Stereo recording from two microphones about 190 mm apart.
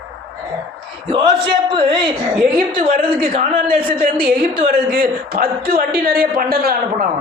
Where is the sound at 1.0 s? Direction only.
25° right (ahead or behind).